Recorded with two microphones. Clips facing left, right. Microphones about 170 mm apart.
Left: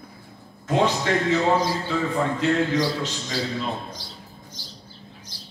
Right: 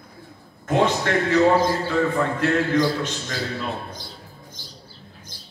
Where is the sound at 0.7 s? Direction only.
55° right (ahead or behind).